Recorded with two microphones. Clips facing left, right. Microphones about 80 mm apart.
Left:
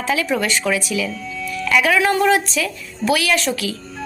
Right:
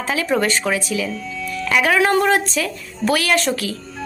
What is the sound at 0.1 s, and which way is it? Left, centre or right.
A woman's voice, right.